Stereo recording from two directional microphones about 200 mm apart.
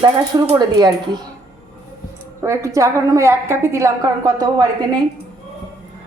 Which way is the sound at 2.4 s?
15° right (ahead or behind).